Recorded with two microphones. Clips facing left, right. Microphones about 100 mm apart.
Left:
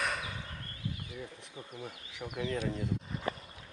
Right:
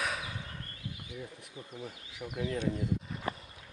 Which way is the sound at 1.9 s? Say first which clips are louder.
Even; 60° left (ahead or behind).